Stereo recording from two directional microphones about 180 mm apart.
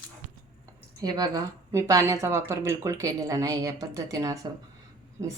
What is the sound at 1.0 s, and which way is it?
A woman's voice, 20° right (ahead or behind).